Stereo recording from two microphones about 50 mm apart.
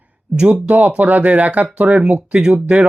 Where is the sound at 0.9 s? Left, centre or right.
Right.